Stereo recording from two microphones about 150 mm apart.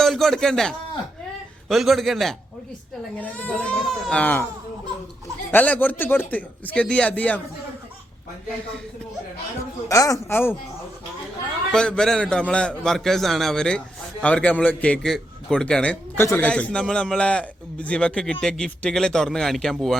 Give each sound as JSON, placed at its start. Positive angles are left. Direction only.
{"t": 0.0, "sound": "a man's voice", "side_deg": 0}
{"t": 5.5, "sound": "a man's voice", "side_deg": 10}
{"t": 9.6, "sound": "a man's voice", "side_deg": 20}
{"t": 11.7, "sound": "a man's voice", "side_deg": 5}